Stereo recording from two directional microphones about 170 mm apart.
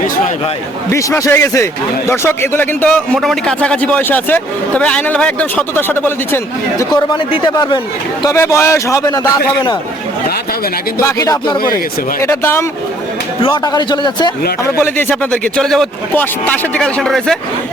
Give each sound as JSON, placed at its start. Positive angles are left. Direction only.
{"t": 0.9, "sound": "a man's voice", "side_deg": 15}
{"t": 11.0, "sound": "a man's voice", "side_deg": 20}
{"t": 14.8, "sound": "a man's voice", "side_deg": 15}